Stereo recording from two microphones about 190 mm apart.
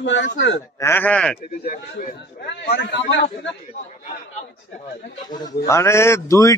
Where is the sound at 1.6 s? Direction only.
50° left (ahead or behind).